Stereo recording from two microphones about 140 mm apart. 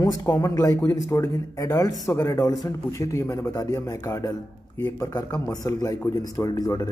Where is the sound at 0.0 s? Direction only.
25° left (ahead or behind).